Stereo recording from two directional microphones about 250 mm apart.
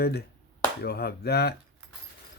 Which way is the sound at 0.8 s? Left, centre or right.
Left.